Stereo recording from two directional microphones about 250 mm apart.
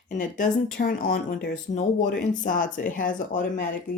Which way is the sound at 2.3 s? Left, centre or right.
Left.